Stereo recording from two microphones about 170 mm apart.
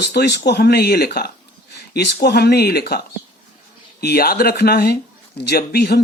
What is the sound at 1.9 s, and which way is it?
Speech, 80° left.